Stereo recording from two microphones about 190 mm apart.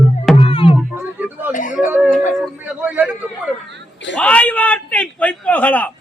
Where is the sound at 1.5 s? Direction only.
45° left (ahead or behind).